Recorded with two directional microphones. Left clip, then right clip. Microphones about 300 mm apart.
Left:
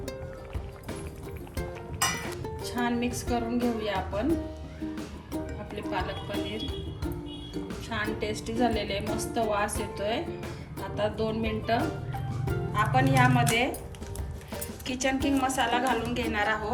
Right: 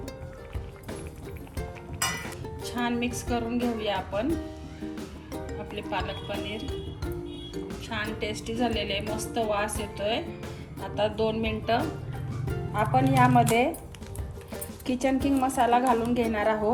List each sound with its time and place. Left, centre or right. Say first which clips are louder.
1.5 s music: left 2 dB; centre
7.7 s a woman's voice: left 1 dB; centre
12.7 s a woman's voice: right 1 dB; centre
14.8 s a woman's voice: right 2 dB; centre